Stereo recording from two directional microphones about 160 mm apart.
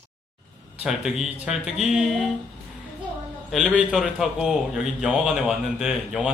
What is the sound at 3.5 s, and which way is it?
Speech, 5° left (ahead or behind).